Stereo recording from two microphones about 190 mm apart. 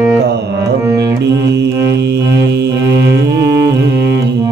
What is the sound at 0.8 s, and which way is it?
Music, 15° right (ahead or behind).